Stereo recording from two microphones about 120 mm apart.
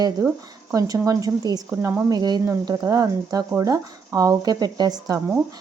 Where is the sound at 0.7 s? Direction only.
25° right (ahead or behind).